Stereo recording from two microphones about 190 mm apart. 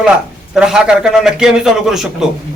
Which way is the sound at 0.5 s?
5° right (ahead or behind).